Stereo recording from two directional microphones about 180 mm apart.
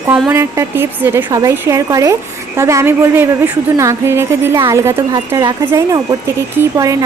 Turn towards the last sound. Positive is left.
turn(degrees=-15)  # may be behind; listen again after turning